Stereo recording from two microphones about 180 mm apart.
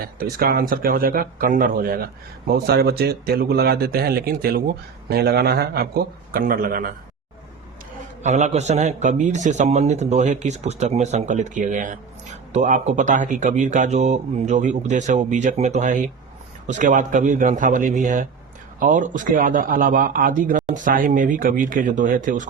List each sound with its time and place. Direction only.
0.0 s a man's voice: 55° right (ahead or behind)
8.2 s a man's voice: 40° right (ahead or behind)